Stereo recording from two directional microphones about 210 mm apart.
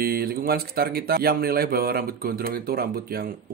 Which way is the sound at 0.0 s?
45° right (ahead or behind).